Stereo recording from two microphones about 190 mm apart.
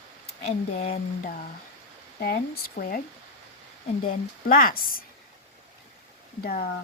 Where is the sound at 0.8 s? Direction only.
35° left (ahead or behind).